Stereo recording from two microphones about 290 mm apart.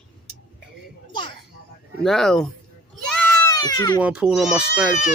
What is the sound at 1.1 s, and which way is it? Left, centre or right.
Children playing, centre.